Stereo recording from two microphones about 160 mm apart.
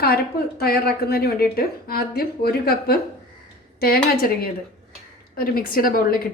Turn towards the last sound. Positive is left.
turn(degrees=65)  # may be behind; listen again after turning